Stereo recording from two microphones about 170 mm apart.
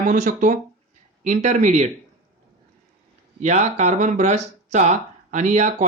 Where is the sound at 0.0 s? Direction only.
45° right (ahead or behind).